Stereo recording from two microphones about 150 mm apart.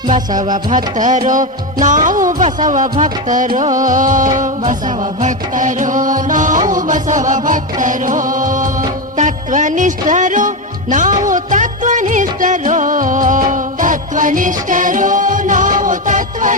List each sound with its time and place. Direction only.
0.1 s music: 60° right (ahead or behind)